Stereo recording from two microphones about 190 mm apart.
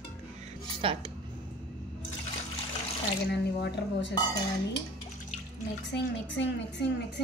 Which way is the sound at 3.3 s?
60° left (ahead or behind).